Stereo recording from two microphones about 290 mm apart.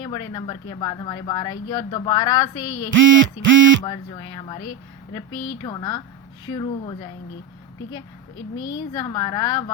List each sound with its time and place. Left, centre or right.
0.0 s speech: centre
3.0 s a sound: right
3.8 s speech: centre
8.6 s speech: centre